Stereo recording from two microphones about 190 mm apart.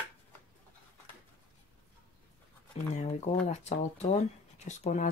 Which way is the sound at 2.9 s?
35° left (ahead or behind).